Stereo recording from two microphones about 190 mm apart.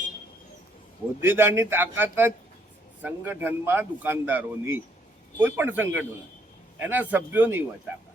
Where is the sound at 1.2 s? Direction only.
10° right (ahead or behind).